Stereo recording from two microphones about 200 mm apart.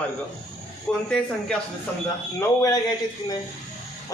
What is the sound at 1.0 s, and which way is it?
Speech, 5° left (ahead or behind).